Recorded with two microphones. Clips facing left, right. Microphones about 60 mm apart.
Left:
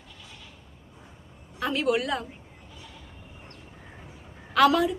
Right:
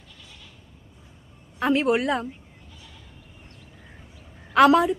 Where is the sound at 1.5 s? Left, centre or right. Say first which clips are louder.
Right 4 dB; right.